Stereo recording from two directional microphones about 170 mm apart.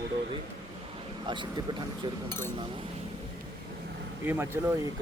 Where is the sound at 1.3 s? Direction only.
30° right (ahead or behind).